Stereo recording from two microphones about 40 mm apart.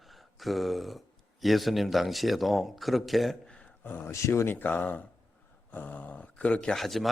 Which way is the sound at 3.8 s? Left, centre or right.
Left.